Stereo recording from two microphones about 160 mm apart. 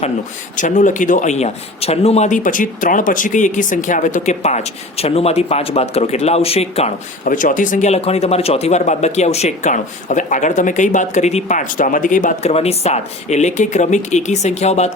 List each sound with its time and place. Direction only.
0.5 s speech: 50° left (ahead or behind)
7.3 s speech: 55° left (ahead or behind)